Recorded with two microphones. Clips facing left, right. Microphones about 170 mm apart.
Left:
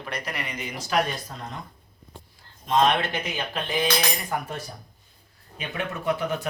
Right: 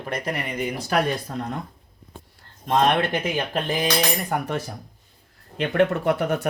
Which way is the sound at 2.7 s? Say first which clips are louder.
Right 2 dB; 55° right (ahead or behind).